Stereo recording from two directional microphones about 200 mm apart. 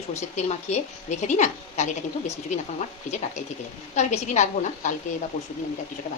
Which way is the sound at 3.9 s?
35° left (ahead or behind).